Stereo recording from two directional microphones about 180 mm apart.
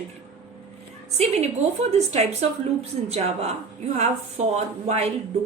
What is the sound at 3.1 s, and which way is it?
A woman's voice, 35° right (ahead or behind).